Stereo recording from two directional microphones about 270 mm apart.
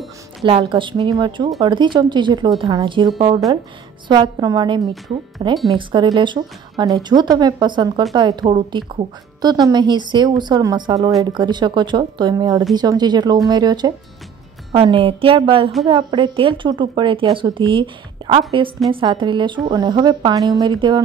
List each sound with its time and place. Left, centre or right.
0.5 s a woman's voice: centre
4.1 s a woman's voice: centre